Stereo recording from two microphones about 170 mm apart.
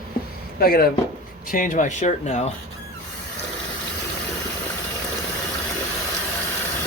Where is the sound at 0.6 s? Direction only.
60° left (ahead or behind).